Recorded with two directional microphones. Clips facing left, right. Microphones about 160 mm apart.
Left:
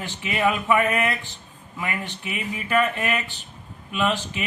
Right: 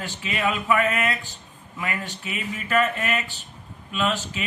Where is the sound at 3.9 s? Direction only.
15° left (ahead or behind).